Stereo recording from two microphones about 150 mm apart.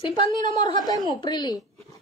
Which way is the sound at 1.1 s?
30° left (ahead or behind).